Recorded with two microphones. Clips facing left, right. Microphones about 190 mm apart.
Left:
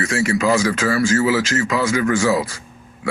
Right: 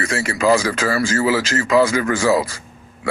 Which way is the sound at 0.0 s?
35° right (ahead or behind).